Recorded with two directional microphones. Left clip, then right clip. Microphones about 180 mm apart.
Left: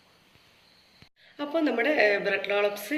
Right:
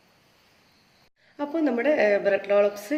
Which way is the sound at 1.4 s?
45° right (ahead or behind).